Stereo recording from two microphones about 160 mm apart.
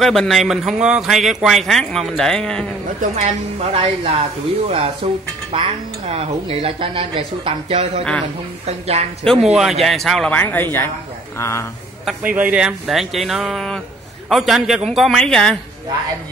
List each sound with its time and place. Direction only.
0.0 s speech: centre (ahead or behind)
3.7 s a woman's voice: 40° right (ahead or behind)
9.2 s speech: centre (ahead or behind); by 11.6 s 15° left (ahead or behind)
12.1 s speech: 10° right (ahead or behind)